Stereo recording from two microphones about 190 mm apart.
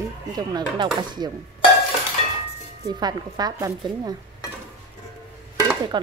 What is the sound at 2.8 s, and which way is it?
A woman's voice, 20° right (ahead or behind).